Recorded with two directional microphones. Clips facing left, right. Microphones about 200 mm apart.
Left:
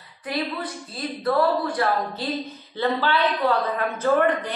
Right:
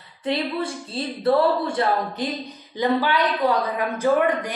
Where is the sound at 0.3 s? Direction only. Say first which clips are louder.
Right 4 dB; 25° right (ahead or behind).